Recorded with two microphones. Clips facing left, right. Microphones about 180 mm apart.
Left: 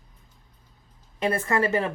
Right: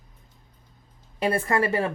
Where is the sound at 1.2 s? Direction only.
30° right (ahead or behind).